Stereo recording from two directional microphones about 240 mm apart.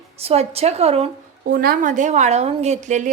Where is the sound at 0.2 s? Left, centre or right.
Right.